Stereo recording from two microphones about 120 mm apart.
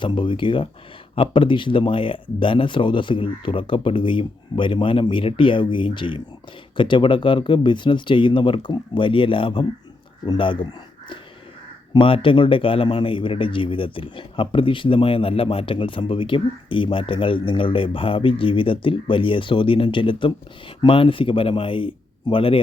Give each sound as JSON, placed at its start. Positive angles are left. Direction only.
{"t": 0.0, "sound": "speech", "side_deg": 45}
{"t": 11.9, "sound": "speech", "side_deg": 45}